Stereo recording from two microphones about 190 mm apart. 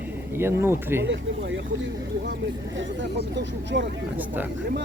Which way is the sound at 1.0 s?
75° right (ahead or behind).